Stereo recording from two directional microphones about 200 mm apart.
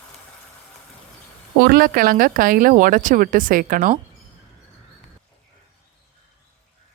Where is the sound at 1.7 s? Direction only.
45° right (ahead or behind).